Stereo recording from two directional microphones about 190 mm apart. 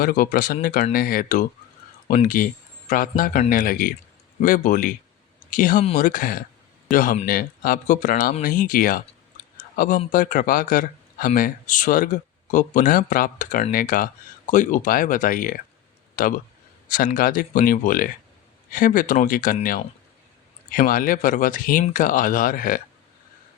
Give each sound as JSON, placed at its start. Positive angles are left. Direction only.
{"t": 0.0, "sound": "speech", "side_deg": 50}
{"t": 9.6, "sound": "a sound", "side_deg": 45}
{"t": 10.1, "sound": "speech", "side_deg": 45}